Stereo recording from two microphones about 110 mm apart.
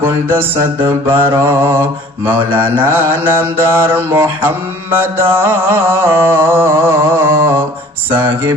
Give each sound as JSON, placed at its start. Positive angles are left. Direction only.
{"t": 0.0, "sound": "mantra", "side_deg": -20}